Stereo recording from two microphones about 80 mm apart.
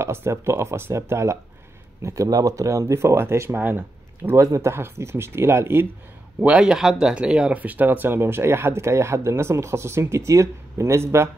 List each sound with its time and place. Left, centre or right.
0.0 s speech: right
4.4 s speech: right
6.4 s speech: centre; by 11.2 s right